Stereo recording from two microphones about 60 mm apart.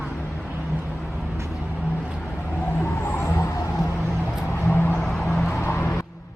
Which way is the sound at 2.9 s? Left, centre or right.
Left.